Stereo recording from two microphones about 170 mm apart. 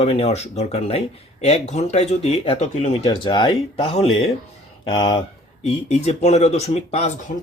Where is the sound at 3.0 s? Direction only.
25° left (ahead or behind).